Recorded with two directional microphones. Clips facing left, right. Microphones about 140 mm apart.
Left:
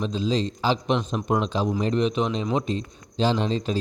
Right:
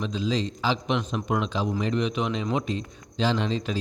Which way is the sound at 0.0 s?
30° left (ahead or behind).